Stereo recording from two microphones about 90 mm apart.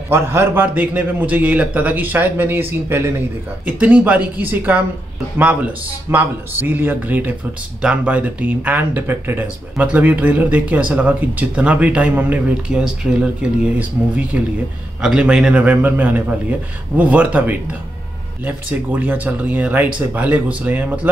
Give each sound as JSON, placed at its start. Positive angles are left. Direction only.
{"t": 0.1, "sound": "speech", "side_deg": -30}
{"t": 9.8, "sound": "speech", "side_deg": -15}